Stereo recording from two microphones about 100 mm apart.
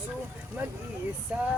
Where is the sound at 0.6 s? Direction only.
15° right (ahead or behind).